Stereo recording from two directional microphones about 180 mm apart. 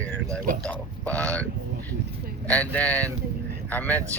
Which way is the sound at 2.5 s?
5° left (ahead or behind).